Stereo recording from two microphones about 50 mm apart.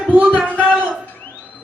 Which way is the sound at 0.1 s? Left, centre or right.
Right.